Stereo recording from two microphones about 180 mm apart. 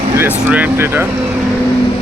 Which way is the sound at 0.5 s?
10° right (ahead or behind).